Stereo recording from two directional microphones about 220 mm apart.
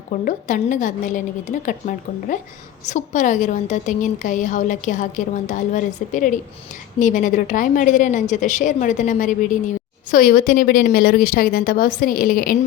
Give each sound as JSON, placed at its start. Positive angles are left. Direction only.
{"t": 0.1, "sound": "a woman's voice", "side_deg": 35}